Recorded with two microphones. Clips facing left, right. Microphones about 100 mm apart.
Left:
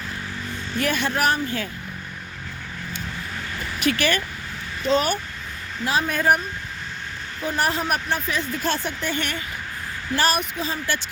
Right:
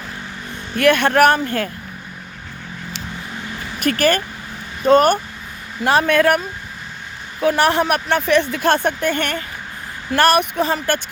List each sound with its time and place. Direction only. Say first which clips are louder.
0.8 s speech: right 10 dB; 60° right (ahead or behind)
3.8 s speech: right 5 dB; 45° right (ahead or behind)
5.8 s speech: right 7 dB; 65° right (ahead or behind)
7.4 s speech: right 8 dB; 70° right (ahead or behind)